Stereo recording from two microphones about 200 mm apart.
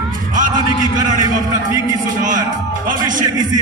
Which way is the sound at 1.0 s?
40° right (ahead or behind).